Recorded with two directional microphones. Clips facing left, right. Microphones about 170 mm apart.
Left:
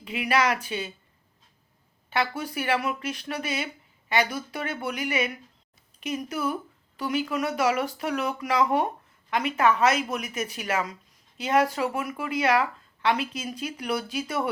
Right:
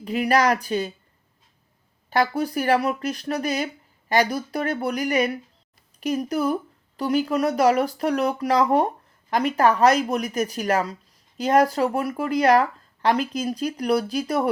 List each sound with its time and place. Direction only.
0.0 s speech: 40° right (ahead or behind)
2.0 s speech: 40° right (ahead or behind)